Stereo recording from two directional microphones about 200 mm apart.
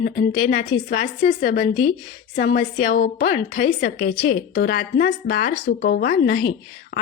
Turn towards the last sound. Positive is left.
turn(degrees=50)  # may be behind; listen again after turning